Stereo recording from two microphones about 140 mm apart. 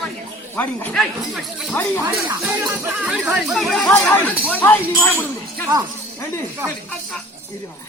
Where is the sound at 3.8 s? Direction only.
15° left (ahead or behind).